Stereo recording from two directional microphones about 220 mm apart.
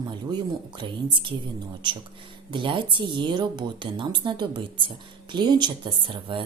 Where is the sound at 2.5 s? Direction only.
20° right (ahead or behind).